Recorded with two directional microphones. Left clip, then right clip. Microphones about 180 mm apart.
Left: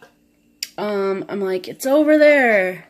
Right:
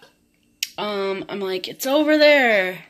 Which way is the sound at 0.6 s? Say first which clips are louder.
Left 3 dB; 20° left (ahead or behind).